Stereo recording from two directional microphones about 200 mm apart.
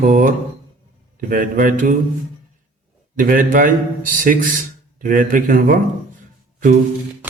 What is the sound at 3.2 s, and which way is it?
A man's voice, 45° right (ahead or behind).